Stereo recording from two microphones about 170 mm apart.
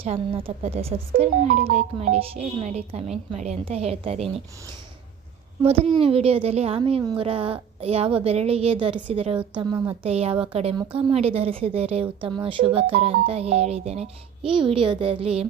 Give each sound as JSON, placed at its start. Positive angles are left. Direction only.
{"t": 0.0, "sound": "speech", "side_deg": -35}
{"t": 5.6, "sound": "speech", "side_deg": -35}
{"t": 9.6, "sound": "speech", "side_deg": -25}
{"t": 10.0, "sound": "speech", "side_deg": -35}